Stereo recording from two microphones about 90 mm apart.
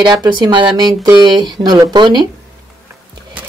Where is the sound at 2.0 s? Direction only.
55° right (ahead or behind).